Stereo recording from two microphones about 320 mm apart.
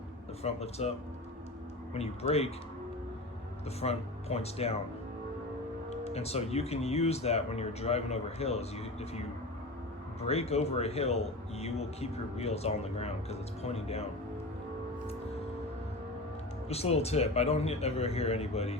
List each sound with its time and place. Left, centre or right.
0.4 s a man's voice: centre
3.8 s a man's voice: centre
6.1 s a man's voice: centre
16.6 s a man's voice: centre